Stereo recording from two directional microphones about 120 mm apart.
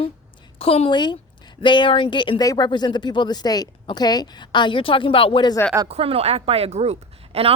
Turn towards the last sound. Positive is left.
turn(degrees=-55)  # may be behind; listen again after turning